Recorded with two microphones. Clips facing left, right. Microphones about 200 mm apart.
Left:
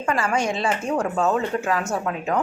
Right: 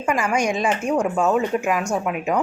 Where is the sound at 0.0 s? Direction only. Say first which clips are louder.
Right 2 dB; 10° right (ahead or behind).